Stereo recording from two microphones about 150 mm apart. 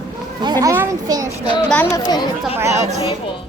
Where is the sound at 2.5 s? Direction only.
20° right (ahead or behind).